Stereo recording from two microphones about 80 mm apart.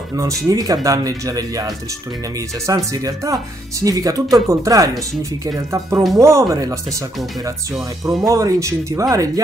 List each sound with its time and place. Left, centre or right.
0.5 s speech: right
8.2 s speech: right